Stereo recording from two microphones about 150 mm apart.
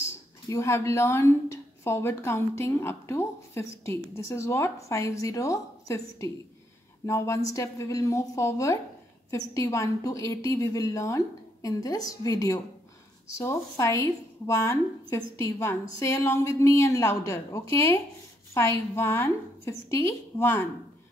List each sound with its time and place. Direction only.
0.5 s a woman's voice: 20° left (ahead or behind)